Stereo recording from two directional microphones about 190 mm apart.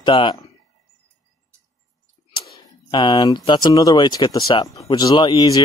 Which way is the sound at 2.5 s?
25° left (ahead or behind).